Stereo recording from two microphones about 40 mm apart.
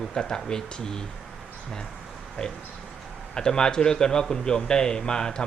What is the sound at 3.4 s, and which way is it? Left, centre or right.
Speech, centre.